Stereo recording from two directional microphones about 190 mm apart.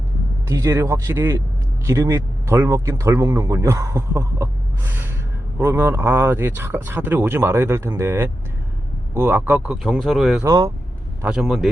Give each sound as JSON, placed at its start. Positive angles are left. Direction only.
{"t": 0.4, "sound": "speech", "side_deg": -15}
{"t": 5.5, "sound": "speech", "side_deg": -10}
{"t": 10.4, "sound": "speech", "side_deg": -20}
{"t": 11.2, "sound": "speech", "side_deg": -5}